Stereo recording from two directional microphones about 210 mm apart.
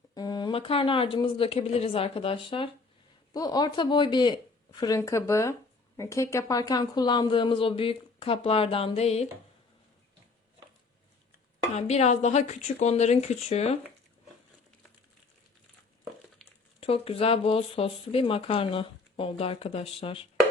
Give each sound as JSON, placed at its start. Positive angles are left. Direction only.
{"t": 0.1, "sound": "speech", "side_deg": 20}
{"t": 11.7, "sound": "speech", "side_deg": 30}
{"t": 16.8, "sound": "speech", "side_deg": 25}